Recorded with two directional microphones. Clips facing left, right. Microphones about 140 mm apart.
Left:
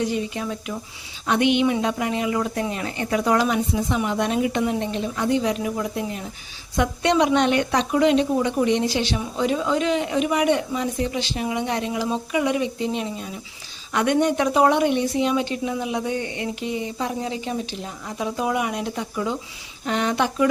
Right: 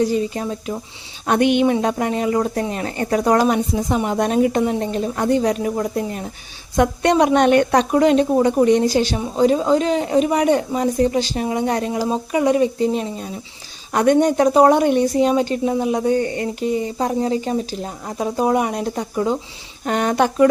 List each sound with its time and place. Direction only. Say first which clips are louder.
0.0 s a woman's voice: right 5 dB; 35° right (ahead or behind)
1.3 s a woman's voice: right 4 dB; 45° right (ahead or behind)